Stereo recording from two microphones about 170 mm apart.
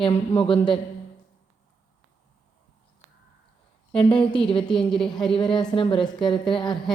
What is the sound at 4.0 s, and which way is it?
Speech, 30° left (ahead or behind).